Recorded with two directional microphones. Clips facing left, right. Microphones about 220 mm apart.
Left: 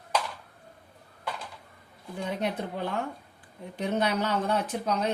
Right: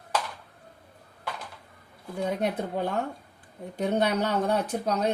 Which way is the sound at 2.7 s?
45° right (ahead or behind).